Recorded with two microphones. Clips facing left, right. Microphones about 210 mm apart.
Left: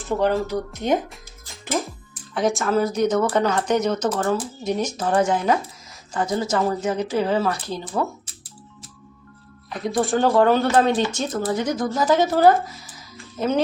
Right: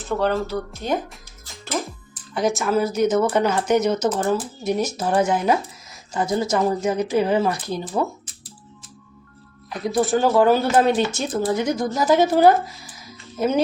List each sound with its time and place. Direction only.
0.1 s a woman's voice: 15° left (ahead or behind)
2.3 s speech: centre (ahead or behind)
9.6 s speech: centre (ahead or behind)